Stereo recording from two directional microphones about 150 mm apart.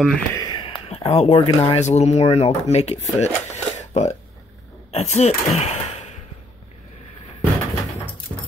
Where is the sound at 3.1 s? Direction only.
50° left (ahead or behind).